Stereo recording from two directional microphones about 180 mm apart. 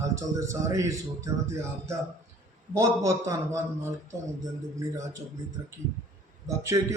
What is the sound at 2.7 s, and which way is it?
A man's voice, 15° right (ahead or behind).